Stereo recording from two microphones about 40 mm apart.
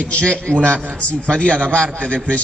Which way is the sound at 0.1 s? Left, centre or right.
Left.